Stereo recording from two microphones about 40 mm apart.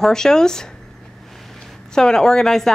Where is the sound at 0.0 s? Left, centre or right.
Centre.